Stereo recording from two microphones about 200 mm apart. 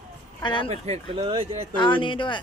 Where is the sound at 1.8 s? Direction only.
25° left (ahead or behind).